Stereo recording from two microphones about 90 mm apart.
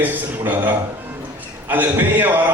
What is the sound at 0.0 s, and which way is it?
Speech, 20° right (ahead or behind).